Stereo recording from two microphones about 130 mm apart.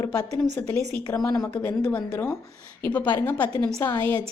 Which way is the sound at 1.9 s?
15° left (ahead or behind).